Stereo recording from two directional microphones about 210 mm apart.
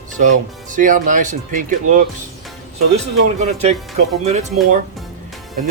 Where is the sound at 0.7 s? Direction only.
40° right (ahead or behind).